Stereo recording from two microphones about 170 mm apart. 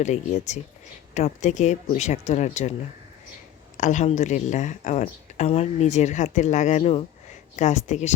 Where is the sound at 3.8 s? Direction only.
45° left (ahead or behind).